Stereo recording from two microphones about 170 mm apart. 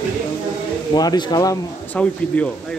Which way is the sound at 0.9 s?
25° left (ahead or behind).